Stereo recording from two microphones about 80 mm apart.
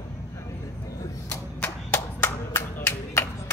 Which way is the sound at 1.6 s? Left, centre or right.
Left.